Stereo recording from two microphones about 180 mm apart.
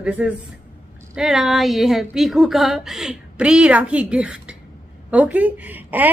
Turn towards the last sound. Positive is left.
turn(degrees=-10)  # may be behind; listen again after turning